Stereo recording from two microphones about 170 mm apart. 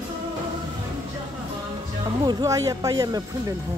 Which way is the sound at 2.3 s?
20° right (ahead or behind).